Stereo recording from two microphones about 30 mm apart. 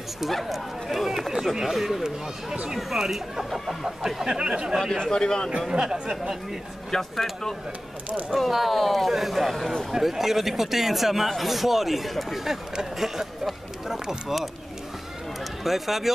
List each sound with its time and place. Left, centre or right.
0.3 s speech: centre
0.8 s speech: centre
4.2 s speech: right
4.8 s speech: centre
5.1 s a man's voice: left
5.7 s speech: right
6.9 s speech: centre
8.4 s speech: centre
12.9 s speech: centre
15.6 s speech: centre